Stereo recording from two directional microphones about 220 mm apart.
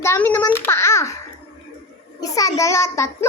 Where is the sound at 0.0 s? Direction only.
10° left (ahead or behind).